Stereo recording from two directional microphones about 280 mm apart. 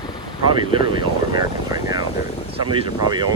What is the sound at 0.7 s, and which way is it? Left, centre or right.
Speech, centre.